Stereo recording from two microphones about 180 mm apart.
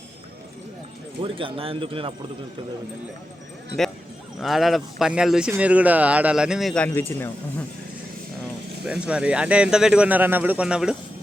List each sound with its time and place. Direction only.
1.2 s speech: 30° right (ahead or behind)
4.4 s speech: centre (ahead or behind)
8.8 s speech: 5° right (ahead or behind)